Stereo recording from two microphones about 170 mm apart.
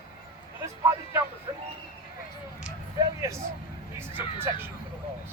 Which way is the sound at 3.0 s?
20° right (ahead or behind).